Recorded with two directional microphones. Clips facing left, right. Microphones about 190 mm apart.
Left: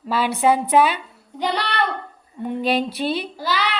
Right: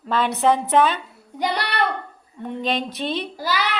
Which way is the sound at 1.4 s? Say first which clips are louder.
Even; 10° right (ahead or behind).